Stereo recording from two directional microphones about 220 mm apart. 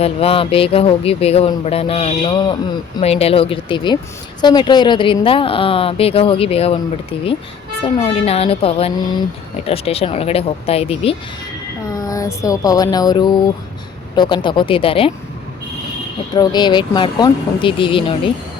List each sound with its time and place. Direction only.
0.0 s a woman's voice: 25° left (ahead or behind)
11.9 s music: 15° left (ahead or behind)
14.2 s a woman's voice: 20° left (ahead or behind)
16.3 s a woman's voice: 20° left (ahead or behind)